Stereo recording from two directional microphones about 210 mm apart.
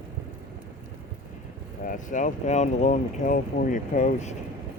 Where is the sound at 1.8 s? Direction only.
40° left (ahead or behind).